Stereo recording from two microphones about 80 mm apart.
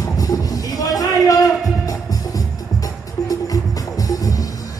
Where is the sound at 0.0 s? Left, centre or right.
Left.